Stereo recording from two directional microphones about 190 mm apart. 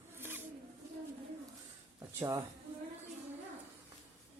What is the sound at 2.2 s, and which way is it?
Speech, 15° right (ahead or behind).